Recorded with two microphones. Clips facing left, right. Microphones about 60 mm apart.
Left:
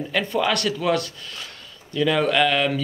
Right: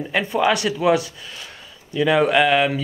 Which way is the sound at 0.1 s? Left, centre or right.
Centre.